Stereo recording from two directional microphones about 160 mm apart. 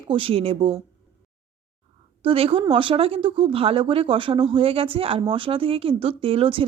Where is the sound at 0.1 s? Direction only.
35° right (ahead or behind).